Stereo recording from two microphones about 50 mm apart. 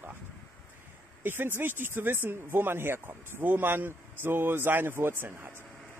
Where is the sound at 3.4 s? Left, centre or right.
Right.